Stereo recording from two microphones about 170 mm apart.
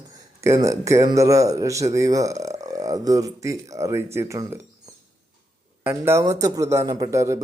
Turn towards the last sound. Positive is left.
turn(degrees=-15)  # may be behind; listen again after turning